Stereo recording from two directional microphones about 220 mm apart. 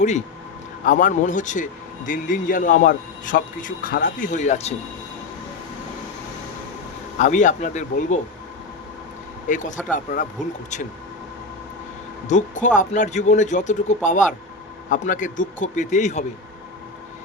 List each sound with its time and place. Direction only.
0.9 s a man's voice: 35° left (ahead or behind)
7.2 s a man's voice: 35° left (ahead or behind)
9.5 s a man's voice: 35° left (ahead or behind)
12.3 s a man's voice: 35° left (ahead or behind)